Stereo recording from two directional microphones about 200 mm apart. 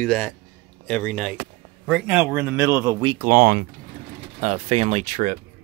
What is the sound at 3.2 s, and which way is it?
Speech, 45° right (ahead or behind).